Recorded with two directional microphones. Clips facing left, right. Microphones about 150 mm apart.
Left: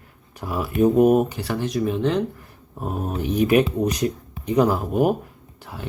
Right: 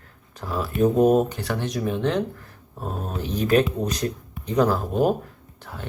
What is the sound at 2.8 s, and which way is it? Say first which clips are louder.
Speech: left 4 dB; 10° left (ahead or behind).